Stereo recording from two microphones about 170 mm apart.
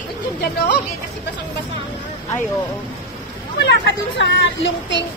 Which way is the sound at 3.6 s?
90° left.